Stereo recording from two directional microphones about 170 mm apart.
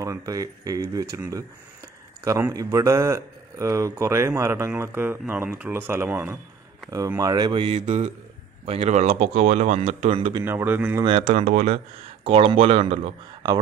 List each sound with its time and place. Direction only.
0.0 s speech: 20° right (ahead or behind)
10.4 s speech: 10° right (ahead or behind)
11.0 s speech: 35° right (ahead or behind)